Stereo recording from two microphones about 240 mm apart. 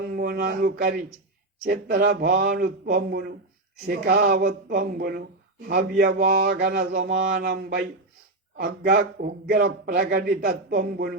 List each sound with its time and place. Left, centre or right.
0.1 s a man's voice: right
6.0 s a sound: right
7.5 s a man's voice: right